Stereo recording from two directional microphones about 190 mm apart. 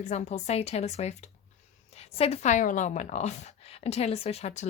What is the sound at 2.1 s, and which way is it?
Speech, 35° left (ahead or behind).